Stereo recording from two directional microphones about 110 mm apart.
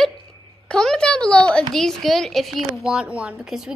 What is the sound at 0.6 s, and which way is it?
A woman's voice, 5° left (ahead or behind).